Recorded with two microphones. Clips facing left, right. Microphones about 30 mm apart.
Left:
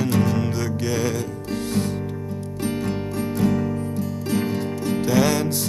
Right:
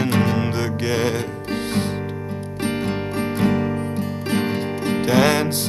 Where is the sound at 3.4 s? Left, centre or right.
Right.